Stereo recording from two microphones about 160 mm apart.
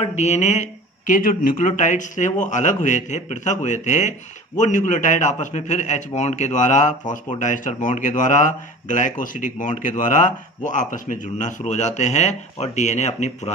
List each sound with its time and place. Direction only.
0.0 s speech: 45° left (ahead or behind)